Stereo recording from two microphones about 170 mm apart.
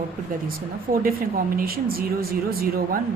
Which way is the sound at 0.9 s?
50° right (ahead or behind).